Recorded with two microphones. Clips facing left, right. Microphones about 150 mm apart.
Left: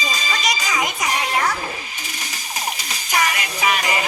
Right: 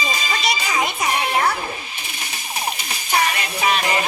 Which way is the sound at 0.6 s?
55° right (ahead or behind).